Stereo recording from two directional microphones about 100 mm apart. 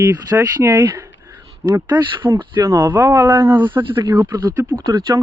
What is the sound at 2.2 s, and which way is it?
Speech, 20° right (ahead or behind).